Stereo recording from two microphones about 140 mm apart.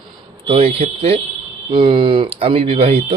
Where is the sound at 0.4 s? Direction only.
45° right (ahead or behind).